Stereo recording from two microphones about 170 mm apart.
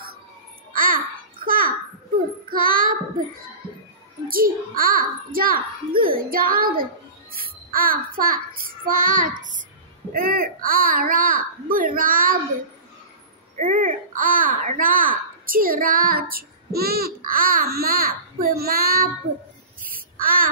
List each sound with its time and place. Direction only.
0.7 s babbling: 55° right (ahead or behind)
2.5 s child singing: 55° right (ahead or behind)
4.3 s a child's voice: 55° right (ahead or behind)
7.3 s child singing: 60° right (ahead or behind)
10.1 s a child's voice: 60° right (ahead or behind)
13.6 s a child's voice: 50° right (ahead or behind)
19.9 s child singing: 55° right (ahead or behind)